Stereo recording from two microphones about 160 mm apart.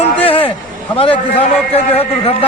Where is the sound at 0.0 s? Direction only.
35° left (ahead or behind).